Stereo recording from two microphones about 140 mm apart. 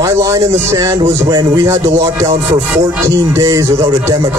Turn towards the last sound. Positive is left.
turn(degrees=-25)  # may be behind; listen again after turning